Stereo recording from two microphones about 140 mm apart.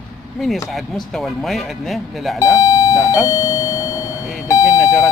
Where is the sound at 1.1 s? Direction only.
Centre (ahead or behind).